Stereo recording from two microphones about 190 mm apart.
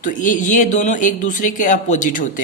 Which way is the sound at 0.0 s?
45° left (ahead or behind).